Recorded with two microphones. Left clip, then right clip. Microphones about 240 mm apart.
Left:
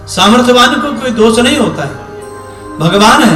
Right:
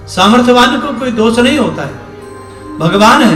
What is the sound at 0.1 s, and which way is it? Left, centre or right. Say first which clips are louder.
A man's voice: left 1 dB; centre.